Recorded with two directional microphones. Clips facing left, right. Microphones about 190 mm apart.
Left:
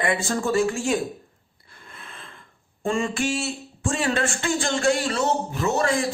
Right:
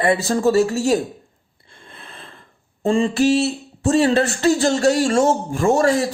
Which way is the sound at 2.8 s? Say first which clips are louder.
Right 8 dB; 30° right (ahead or behind).